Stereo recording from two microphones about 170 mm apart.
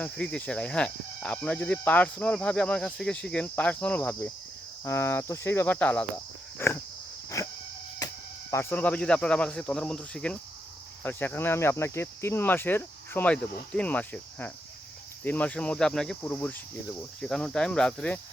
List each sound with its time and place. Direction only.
0.0 s speech: 5° left (ahead or behind)
7.4 s a sound: 20° left (ahead or behind)
8.7 s speech: 10° left (ahead or behind)